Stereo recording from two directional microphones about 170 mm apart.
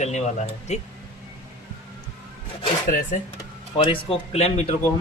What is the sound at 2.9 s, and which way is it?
Speech, 50° left (ahead or behind).